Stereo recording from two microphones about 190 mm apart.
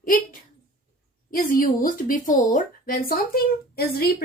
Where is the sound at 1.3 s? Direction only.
50° left (ahead or behind).